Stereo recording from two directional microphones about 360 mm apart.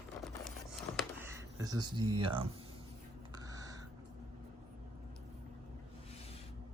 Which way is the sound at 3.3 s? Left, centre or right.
Centre.